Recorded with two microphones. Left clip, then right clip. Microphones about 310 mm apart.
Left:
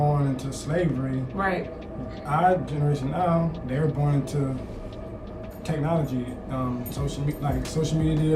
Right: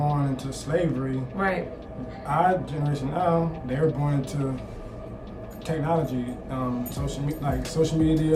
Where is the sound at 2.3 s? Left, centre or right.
Centre.